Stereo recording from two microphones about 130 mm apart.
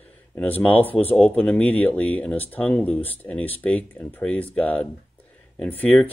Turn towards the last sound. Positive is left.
turn(degrees=10)  # may be behind; listen again after turning